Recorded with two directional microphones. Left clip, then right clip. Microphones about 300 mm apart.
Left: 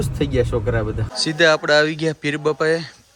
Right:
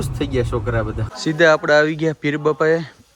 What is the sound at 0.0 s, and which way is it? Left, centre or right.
Speech, centre.